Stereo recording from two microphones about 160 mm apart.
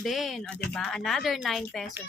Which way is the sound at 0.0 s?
Centre (ahead or behind).